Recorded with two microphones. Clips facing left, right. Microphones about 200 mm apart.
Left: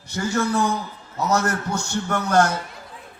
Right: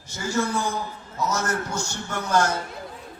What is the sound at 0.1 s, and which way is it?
A man's voice, 60° left (ahead or behind).